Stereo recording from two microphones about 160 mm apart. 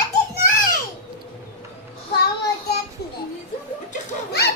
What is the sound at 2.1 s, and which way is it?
Child singing, 90° left.